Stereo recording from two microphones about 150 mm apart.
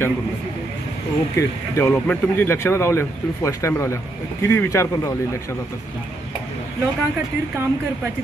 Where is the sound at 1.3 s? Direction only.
20° left (ahead or behind).